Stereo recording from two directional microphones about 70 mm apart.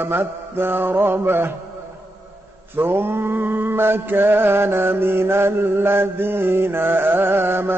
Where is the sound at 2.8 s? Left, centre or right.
Right.